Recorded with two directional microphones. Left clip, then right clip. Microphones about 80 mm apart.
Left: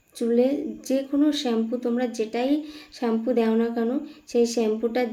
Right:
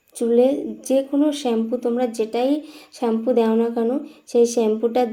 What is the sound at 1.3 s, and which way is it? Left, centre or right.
A woman's voice, right.